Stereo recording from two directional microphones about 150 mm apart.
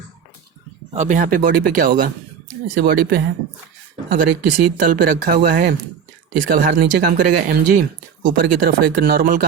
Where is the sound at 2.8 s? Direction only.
80° right.